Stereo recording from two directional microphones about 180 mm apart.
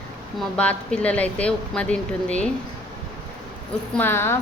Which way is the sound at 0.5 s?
5° left (ahead or behind).